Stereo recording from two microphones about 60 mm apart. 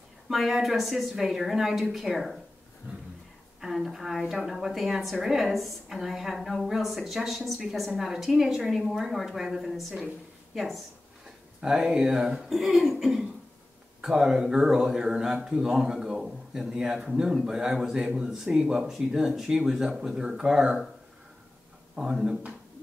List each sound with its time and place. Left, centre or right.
0.3 s a woman's voice: centre
3.6 s a woman's voice: centre
21.9 s a man's voice: centre